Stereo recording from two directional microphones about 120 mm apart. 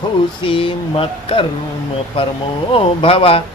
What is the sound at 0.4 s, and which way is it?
Speech, 45° left (ahead or behind).